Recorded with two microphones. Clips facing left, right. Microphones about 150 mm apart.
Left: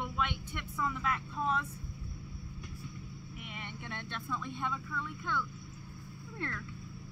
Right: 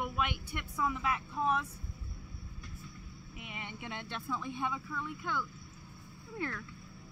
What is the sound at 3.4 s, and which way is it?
Speech, 15° right (ahead or behind).